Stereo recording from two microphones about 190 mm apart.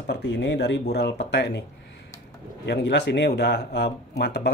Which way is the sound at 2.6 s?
65° left (ahead or behind).